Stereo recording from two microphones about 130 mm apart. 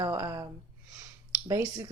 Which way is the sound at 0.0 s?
30° right (ahead or behind).